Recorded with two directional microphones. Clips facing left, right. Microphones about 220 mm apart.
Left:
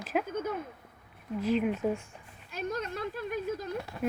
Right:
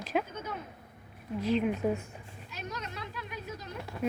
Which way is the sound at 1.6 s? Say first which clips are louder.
Even; 5° right (ahead or behind).